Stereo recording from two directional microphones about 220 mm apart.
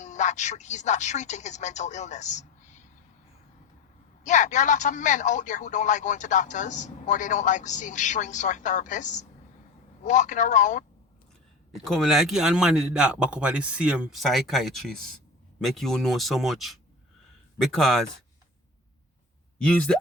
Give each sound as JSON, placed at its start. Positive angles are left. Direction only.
{"t": 0.0, "sound": "speech", "side_deg": 35}
{"t": 4.2, "sound": "speech", "side_deg": 35}
{"t": 11.9, "sound": "speech", "side_deg": 0}
{"t": 19.5, "sound": "speech", "side_deg": 5}